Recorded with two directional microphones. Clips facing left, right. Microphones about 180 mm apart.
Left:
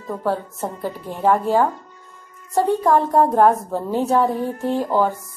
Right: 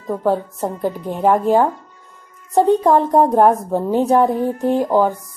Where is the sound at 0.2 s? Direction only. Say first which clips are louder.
Right 4 dB; 15° right (ahead or behind).